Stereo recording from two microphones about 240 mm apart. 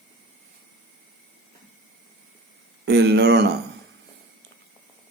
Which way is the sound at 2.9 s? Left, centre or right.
Right.